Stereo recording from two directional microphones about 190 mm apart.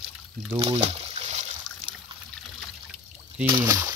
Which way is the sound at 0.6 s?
35° right (ahead or behind).